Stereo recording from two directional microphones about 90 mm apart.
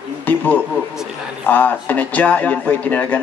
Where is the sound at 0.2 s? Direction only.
20° left (ahead or behind).